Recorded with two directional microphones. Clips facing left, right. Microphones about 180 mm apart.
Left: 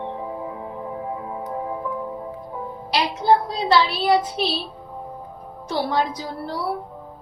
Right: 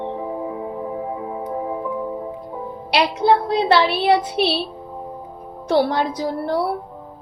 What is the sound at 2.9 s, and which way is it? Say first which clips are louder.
A woman's voice: right 2 dB; 70° right (ahead or behind).